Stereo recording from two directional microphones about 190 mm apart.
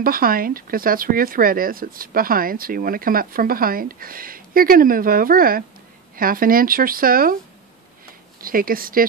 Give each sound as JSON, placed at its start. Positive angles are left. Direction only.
{"t": 0.0, "sound": "speech", "side_deg": -50}
{"t": 8.4, "sound": "speech", "side_deg": -50}